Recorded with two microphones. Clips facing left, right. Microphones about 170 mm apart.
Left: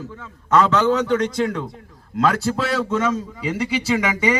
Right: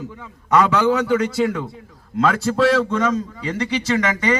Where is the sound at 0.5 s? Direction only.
10° right (ahead or behind).